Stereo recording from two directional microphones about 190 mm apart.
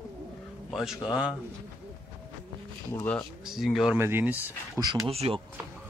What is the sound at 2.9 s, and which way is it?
Speech, 15° left (ahead or behind).